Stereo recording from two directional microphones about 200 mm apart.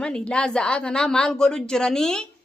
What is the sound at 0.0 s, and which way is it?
A woman's voice, 5° left (ahead or behind).